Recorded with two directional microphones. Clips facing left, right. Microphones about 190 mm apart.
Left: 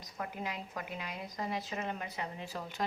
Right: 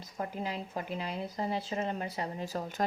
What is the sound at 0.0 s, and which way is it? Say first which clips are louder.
Speech: right 4 dB; 30° right (ahead or behind).